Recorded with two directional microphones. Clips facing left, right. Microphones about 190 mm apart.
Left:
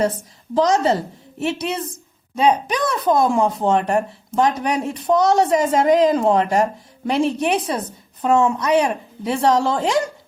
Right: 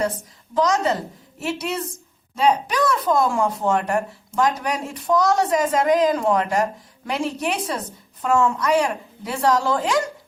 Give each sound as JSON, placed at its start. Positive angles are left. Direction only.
{"t": 0.5, "sound": "a woman's voice", "side_deg": 30}